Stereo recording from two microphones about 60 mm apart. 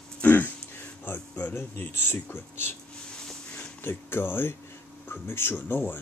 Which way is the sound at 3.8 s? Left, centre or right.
Left.